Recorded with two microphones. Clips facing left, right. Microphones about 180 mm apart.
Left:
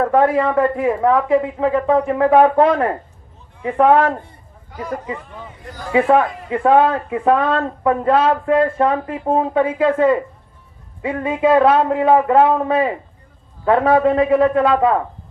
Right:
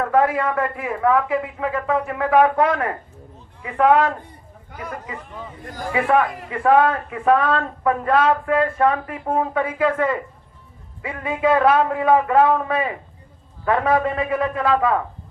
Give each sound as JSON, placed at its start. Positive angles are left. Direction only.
{"t": 0.0, "sound": "a man's voice", "side_deg": 30}
{"t": 5.9, "sound": "a man's voice", "side_deg": 25}